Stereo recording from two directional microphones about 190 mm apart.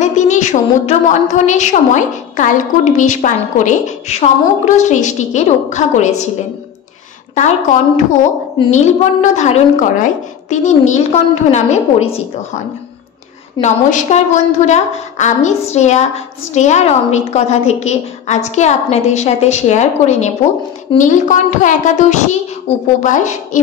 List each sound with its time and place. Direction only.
0.0 s a woman's voice: 40° left (ahead or behind)
7.3 s a woman's voice: 40° left (ahead or behind)
13.6 s a woman's voice: 40° left (ahead or behind)